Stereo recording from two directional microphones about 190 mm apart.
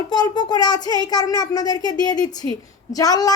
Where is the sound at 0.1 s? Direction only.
20° left (ahead or behind).